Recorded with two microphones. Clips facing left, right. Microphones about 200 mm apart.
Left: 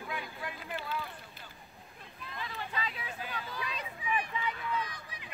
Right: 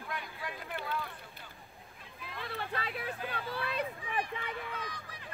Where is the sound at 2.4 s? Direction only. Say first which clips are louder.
Right 1 dB; 60° right (ahead or behind).